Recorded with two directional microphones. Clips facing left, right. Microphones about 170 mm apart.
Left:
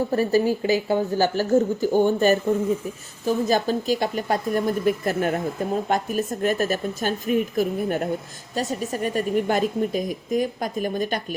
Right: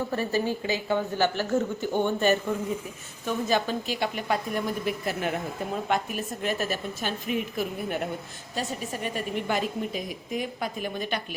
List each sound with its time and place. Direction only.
0.1 s a woman's voice: 40° left (ahead or behind)